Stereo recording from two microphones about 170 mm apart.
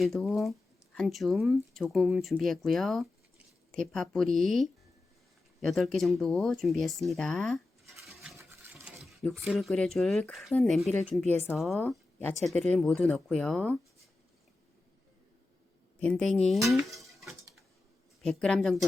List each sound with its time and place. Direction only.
0.0 s speech: centre (ahead or behind)
8.0 s toothbrush: centre (ahead or behind)
8.4 s water: 15° right (ahead or behind)
9.0 s speech: centre (ahead or behind)
11.8 s speech: 10° left (ahead or behind)
16.0 s speech: 5° left (ahead or behind)
16.9 s dishes: 20° right (ahead or behind)
17.2 s dishes: centre (ahead or behind)
18.2 s speech: 5° left (ahead or behind)